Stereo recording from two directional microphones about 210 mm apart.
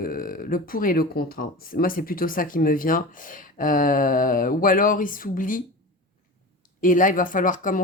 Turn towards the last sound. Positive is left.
turn(degrees=40)  # may be behind; listen again after turning